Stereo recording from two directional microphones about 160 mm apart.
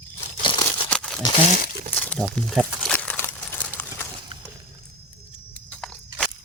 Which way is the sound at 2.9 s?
10° left (ahead or behind).